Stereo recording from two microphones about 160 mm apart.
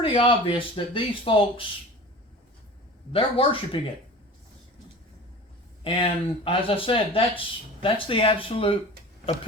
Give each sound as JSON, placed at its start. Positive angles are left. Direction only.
{"t": 0.0, "sound": "speech", "side_deg": 35}
{"t": 3.1, "sound": "speech", "side_deg": 35}
{"t": 5.8, "sound": "speech", "side_deg": 35}